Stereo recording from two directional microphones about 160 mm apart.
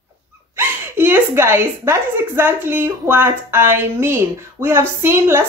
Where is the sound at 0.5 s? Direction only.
15° right (ahead or behind).